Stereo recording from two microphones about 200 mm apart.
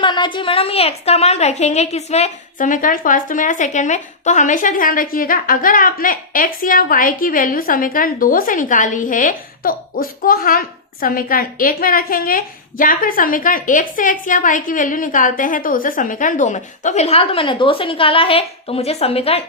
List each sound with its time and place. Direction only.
0.0 s a woman's voice: 25° left (ahead or behind)